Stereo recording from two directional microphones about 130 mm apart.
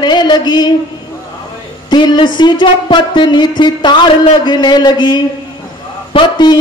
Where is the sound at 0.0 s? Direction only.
35° left (ahead or behind).